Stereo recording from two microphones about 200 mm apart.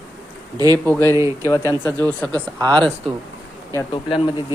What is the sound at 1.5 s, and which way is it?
Speech, 15° left (ahead or behind).